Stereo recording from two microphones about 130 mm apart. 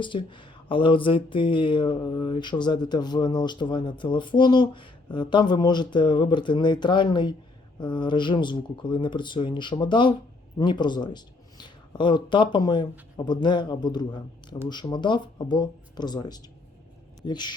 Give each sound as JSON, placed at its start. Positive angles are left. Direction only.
{"t": 0.0, "sound": "speech", "side_deg": 40}